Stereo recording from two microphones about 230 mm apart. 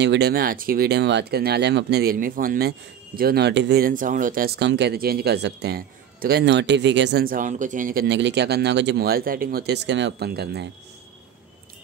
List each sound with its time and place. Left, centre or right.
0.0 s speech: right